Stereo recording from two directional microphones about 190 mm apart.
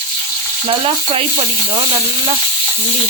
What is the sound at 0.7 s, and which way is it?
Stir, 30° right (ahead or behind).